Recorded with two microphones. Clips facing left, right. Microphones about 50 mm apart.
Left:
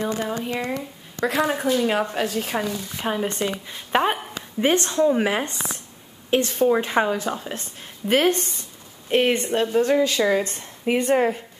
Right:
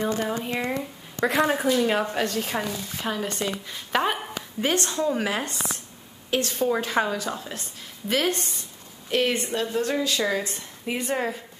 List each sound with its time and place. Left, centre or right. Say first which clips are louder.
0.1 s a woman's voice: left 1 dB; centre
3.0 s speech: left 4 dB; left
3.4 s a woman's voice: left 3 dB; centre; by 11.4 s left